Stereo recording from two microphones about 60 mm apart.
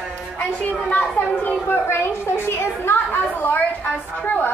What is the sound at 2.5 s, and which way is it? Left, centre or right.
Children playing, left.